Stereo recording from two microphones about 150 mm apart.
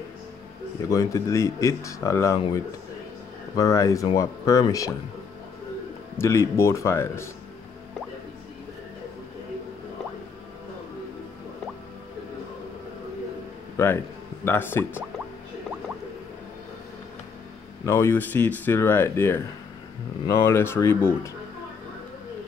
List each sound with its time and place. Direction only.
0.8 s speech: 20° left (ahead or behind)
3.5 s speech: 20° left (ahead or behind)
6.1 s speech: 15° left (ahead or behind)
13.7 s speech: 15° left (ahead or behind)
17.8 s speech: 20° left (ahead or behind)